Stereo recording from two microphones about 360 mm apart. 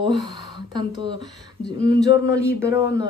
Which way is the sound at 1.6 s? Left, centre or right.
Left.